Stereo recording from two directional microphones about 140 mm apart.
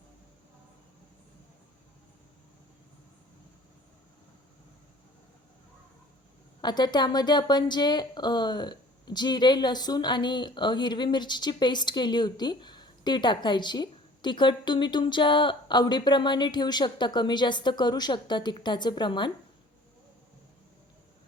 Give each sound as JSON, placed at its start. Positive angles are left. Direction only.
{"t": 6.6, "sound": "speech", "side_deg": 30}